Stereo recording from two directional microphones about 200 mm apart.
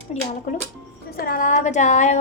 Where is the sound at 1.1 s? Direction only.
45° left (ahead or behind).